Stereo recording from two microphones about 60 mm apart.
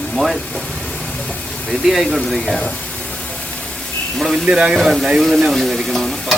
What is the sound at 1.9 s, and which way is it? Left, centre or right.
Stir, centre.